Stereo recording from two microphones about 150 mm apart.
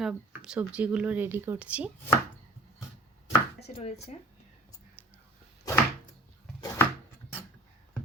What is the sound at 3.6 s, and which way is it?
Speech, 45° left (ahead or behind).